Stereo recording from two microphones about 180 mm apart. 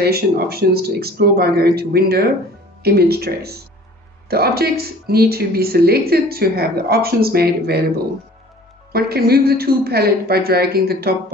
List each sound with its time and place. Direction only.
0.0 s speech: 60° right (ahead or behind)
8.9 s speech: 60° right (ahead or behind)